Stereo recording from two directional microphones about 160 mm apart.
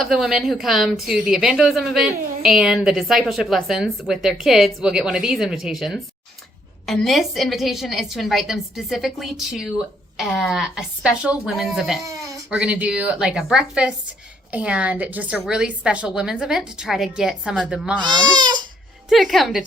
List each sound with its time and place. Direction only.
0.0 s a woman's voice: centre (ahead or behind)
12.0 s bleat: 20° right (ahead or behind)
12.5 s a woman's voice: 5° right (ahead or behind)
18.0 s speech: 30° right (ahead or behind)
19.0 s a woman's voice: centre (ahead or behind)